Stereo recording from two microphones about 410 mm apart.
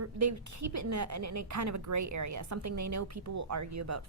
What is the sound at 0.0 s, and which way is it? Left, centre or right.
A woman's voice, right.